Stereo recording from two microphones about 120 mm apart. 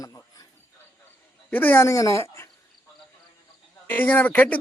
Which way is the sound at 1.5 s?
15° left (ahead or behind).